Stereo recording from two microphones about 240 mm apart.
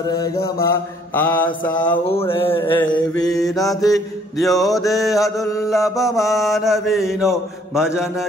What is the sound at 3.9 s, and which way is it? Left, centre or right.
Mantra, centre.